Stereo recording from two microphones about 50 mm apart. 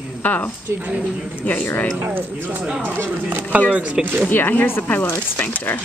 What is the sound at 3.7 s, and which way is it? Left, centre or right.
Speech, right.